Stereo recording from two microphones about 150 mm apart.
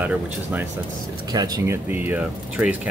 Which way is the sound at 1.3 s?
25° right (ahead or behind).